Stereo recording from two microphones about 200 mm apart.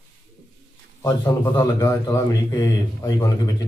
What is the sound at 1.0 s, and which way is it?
A man's voice, 15° left (ahead or behind).